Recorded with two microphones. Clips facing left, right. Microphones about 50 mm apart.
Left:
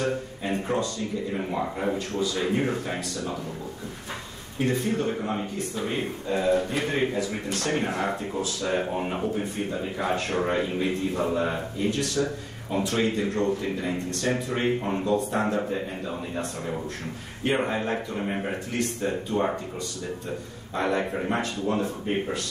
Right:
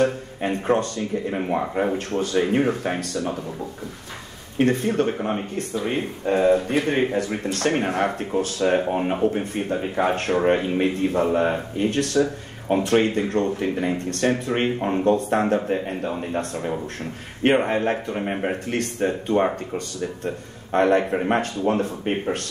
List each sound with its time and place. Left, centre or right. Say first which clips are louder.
0.0 s speech: right 6 dB; right
4.6 s a man's voice: right 6 dB; right
18.7 s speech: right 4 dB; right
19.0 s a man's voice: right 7 dB; right
20.7 s speech: right 7 dB; right